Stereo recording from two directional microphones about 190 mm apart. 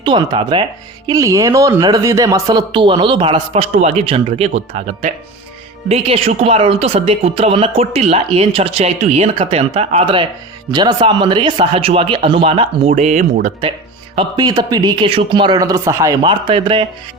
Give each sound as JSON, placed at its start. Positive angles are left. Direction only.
{"t": 0.0, "sound": "speech", "side_deg": -20}
{"t": 14.2, "sound": "speech", "side_deg": -20}
{"t": 16.2, "sound": "speech", "side_deg": -25}